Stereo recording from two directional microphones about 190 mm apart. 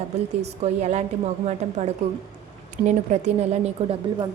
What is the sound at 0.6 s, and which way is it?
Speech, 35° right (ahead or behind).